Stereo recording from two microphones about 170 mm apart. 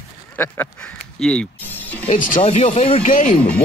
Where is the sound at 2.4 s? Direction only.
35° left (ahead or behind).